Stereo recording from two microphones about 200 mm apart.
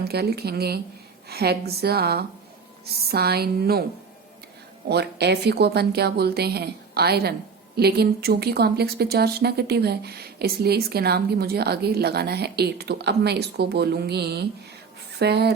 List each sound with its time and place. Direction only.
0.0 s speech: 55° right (ahead or behind)
4.9 s speech: 55° right (ahead or behind)